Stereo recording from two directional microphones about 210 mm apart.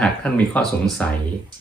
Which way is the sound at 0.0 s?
5° left (ahead or behind).